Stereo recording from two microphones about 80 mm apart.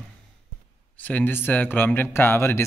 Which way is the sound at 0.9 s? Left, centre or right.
Left.